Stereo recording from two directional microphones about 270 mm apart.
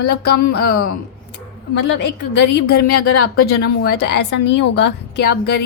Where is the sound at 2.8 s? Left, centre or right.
Left.